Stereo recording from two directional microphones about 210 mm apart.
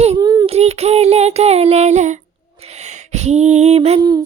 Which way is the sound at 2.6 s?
30° right (ahead or behind).